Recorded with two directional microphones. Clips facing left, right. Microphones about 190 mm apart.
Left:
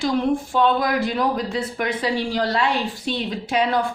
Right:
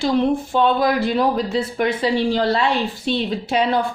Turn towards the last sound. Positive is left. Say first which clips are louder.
# right 2 dB
turn(degrees=-30)  # may be behind; listen again after turning